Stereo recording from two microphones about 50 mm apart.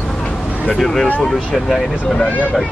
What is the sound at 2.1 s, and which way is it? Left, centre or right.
Speech, left.